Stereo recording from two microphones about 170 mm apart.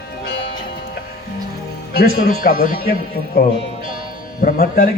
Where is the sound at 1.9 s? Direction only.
60° left (ahead or behind).